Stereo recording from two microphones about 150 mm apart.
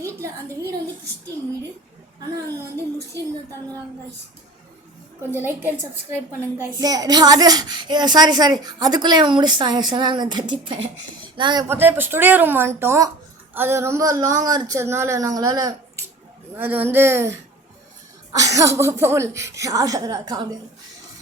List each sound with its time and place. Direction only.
0.0 s a woman's voice: 20° right (ahead or behind)
5.3 s speech: 15° right (ahead or behind)
6.7 s a child's voice: 25° right (ahead or behind)
11.7 s a child's voice: 15° right (ahead or behind)
16.6 s a child's voice: 10° right (ahead or behind); by 20.6 s 30° right (ahead or behind)